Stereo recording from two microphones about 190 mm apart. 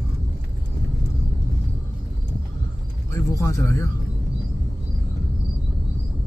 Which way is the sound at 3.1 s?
15° left (ahead or behind).